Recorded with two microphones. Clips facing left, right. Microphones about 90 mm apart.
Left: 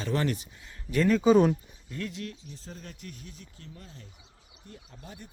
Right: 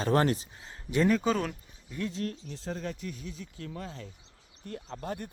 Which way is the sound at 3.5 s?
90° right.